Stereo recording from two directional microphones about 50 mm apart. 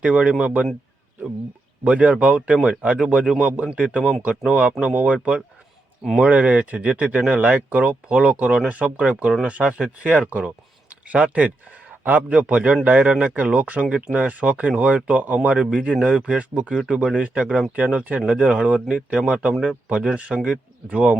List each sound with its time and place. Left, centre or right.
0.0 s speech: right
1.8 s speech: right